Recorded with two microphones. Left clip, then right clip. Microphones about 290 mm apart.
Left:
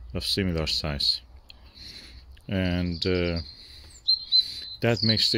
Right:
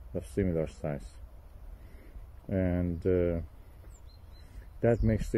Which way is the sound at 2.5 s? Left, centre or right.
Left.